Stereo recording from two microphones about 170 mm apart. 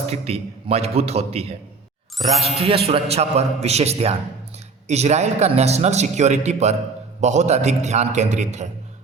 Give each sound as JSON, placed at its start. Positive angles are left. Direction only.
{"t": 0.1, "sound": "a man's voice", "side_deg": -35}